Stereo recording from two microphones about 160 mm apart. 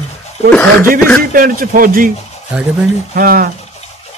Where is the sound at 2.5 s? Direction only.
5° right (ahead or behind).